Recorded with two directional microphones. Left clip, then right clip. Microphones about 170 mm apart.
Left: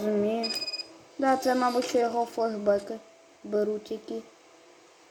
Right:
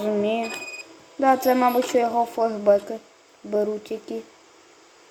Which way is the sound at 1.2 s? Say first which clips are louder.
Right 6 dB; 10° right (ahead or behind).